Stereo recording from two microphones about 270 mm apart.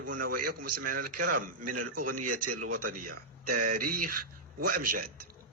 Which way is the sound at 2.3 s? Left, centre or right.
Right.